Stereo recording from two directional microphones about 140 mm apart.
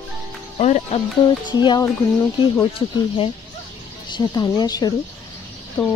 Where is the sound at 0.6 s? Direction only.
55° left (ahead or behind).